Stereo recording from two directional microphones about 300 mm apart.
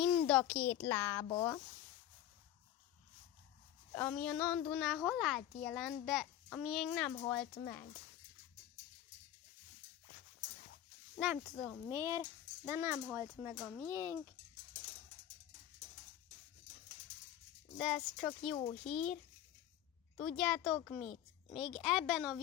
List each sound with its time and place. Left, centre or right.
0.3 s a child's voice: centre
3.9 s a child's voice: centre
11.2 s a child's voice: centre
13.9 s speech: centre
17.7 s a child's voice: centre
18.5 s a child's voice: centre
18.9 s a child's voice: centre